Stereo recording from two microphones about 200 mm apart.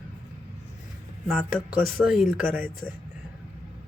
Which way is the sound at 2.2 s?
10° right (ahead or behind).